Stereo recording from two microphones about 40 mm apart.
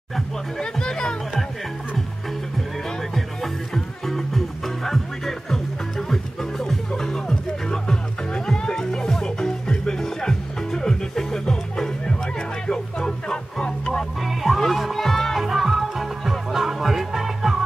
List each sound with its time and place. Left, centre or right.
0.6 s music: centre
3.7 s music: centre
14.2 s music: centre
15.4 s music: centre